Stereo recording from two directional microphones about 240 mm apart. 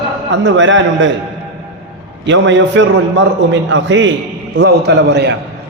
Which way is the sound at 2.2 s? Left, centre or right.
Right.